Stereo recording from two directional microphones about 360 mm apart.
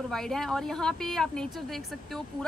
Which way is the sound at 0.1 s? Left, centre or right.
Centre.